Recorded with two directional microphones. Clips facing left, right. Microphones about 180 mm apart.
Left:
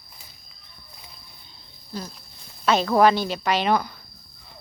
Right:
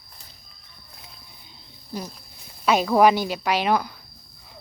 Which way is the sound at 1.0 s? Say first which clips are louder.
Right 1 dB; centre (ahead or behind).